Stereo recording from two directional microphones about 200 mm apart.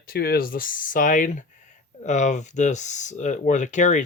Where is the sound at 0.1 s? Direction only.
50° left (ahead or behind).